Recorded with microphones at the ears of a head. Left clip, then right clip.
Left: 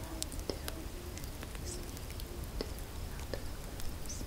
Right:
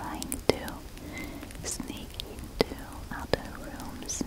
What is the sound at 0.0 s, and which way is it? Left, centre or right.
Whispering, right.